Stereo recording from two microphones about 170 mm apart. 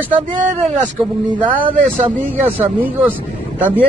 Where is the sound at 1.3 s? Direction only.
30° right (ahead or behind).